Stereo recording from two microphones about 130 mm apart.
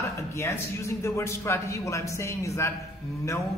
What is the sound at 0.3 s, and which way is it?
A man's voice, 20° left (ahead or behind).